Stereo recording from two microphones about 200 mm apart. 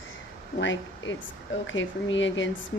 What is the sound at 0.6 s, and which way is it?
A woman's voice, 70° left (ahead or behind).